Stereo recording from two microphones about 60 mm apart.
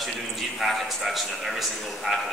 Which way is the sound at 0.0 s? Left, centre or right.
Centre.